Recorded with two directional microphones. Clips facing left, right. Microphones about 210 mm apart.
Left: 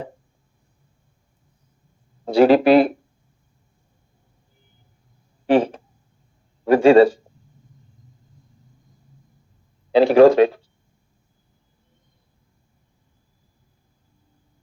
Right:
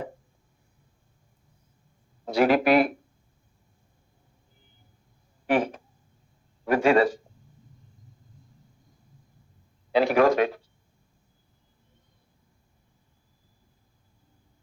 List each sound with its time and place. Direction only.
2.2 s speech: 30° left (ahead or behind)
5.5 s a sound: 30° left (ahead or behind)
6.7 s speech: 30° left (ahead or behind)
9.9 s speech: 30° left (ahead or behind)